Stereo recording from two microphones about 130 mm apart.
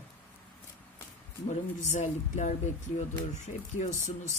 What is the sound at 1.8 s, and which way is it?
Speech, 65° left (ahead or behind).